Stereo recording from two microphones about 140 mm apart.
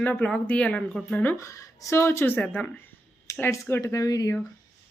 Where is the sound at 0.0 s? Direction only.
10° left (ahead or behind).